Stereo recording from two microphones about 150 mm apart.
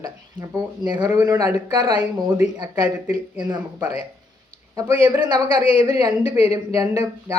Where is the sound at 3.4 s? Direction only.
30° right (ahead or behind).